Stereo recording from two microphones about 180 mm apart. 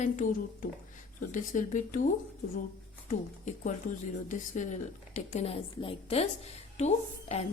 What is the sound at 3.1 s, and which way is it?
A woman's voice, 45° left (ahead or behind).